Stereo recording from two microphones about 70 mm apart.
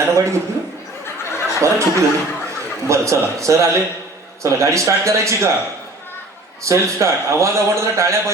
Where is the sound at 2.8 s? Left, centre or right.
Right.